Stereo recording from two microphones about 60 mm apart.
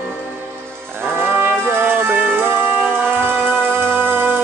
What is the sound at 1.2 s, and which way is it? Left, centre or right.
Music, right.